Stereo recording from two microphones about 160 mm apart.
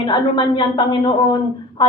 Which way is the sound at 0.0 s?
30° left (ahead or behind).